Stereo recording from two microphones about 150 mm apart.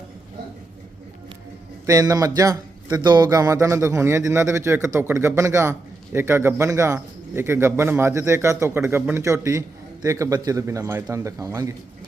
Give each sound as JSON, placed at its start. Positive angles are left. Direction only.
{"t": 1.9, "sound": "a man's voice", "side_deg": -25}